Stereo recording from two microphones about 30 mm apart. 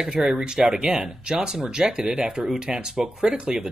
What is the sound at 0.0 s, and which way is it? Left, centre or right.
Speech, centre.